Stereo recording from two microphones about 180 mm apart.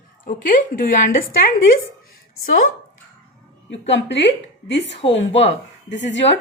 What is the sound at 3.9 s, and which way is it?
A woman's voice, 75° left (ahead or behind).